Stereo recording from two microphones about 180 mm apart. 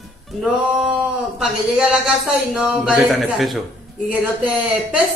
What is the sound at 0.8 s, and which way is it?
A man's voice, centre (ahead or behind).